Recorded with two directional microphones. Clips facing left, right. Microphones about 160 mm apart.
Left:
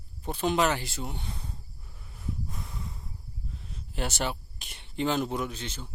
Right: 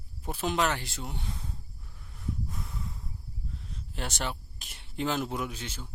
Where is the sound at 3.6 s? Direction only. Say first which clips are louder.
Left 4 dB; 5° left (ahead or behind).